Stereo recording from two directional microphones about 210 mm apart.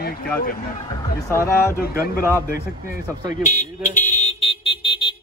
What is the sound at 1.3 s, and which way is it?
Speech, 10° left (ahead or behind).